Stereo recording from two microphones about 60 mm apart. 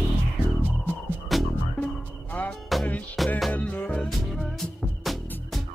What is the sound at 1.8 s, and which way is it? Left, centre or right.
Music, left.